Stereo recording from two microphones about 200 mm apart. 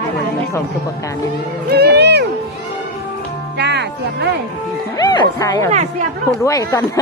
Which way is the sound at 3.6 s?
55° right (ahead or behind).